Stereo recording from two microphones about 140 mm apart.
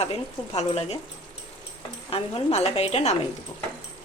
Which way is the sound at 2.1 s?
40° left (ahead or behind).